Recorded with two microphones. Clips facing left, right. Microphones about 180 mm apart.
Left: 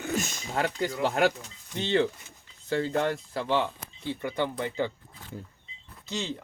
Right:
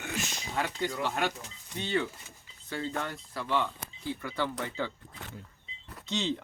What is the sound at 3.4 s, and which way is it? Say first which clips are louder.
Speech: left 2 dB; 30° left (ahead or behind).